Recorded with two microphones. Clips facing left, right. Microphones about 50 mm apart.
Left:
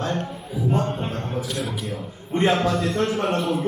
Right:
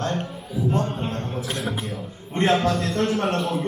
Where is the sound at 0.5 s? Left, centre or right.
Centre.